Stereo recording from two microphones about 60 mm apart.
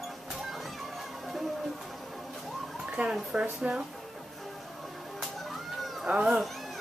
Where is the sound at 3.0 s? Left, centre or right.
Right.